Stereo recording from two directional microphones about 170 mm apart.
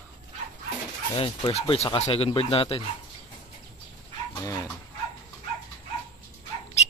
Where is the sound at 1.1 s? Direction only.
30° left (ahead or behind).